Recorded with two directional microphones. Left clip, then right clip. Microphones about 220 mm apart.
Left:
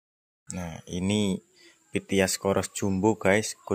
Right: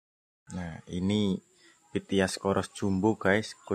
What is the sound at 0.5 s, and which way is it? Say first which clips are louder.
Speech: left 3 dB; 5° left (ahead or behind).